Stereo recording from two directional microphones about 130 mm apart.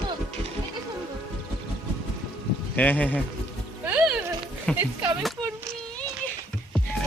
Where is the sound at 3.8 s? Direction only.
10° right (ahead or behind).